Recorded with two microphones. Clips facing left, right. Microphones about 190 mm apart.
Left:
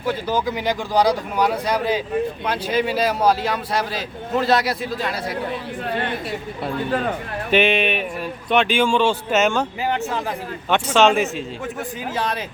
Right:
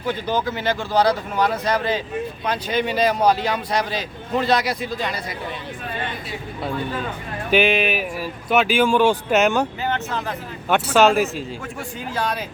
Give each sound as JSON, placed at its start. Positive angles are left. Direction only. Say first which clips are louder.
{"t": 0.0, "sound": "speech", "louder": "left 1 dB", "side_deg": 5}
{"t": 5.9, "sound": "a woman's voice", "louder": "left 5 dB", "side_deg": 65}
{"t": 7.5, "sound": "speech", "louder": "even", "side_deg": -5}
{"t": 9.8, "sound": "speech", "louder": "left 2 dB", "side_deg": 15}
{"t": 10.9, "sound": "speech", "louder": "even", "side_deg": -5}